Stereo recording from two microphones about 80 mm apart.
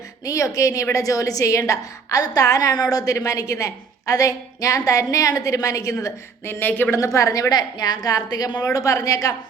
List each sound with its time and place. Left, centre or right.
0.3 s a woman's voice: left
6.4 s speech: left
6.9 s a woman's voice: left
7.5 s a woman's voice: left